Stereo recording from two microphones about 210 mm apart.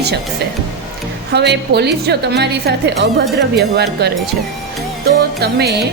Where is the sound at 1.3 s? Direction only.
55° right (ahead or behind).